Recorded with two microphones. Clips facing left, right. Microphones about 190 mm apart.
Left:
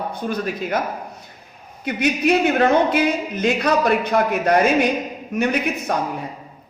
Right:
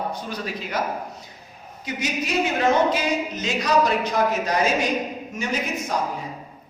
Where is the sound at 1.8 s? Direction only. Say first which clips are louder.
Left 8 dB; 60° left (ahead or behind).